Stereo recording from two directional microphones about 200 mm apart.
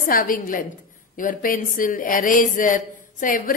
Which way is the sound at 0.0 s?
45° left (ahead or behind).